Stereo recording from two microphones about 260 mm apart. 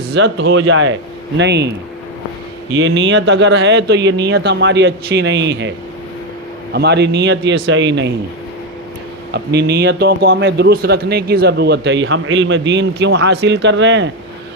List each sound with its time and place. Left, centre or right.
0.1 s a man's voice: right
2.7 s speech: right
6.7 s speech: right
9.3 s a man's voice: right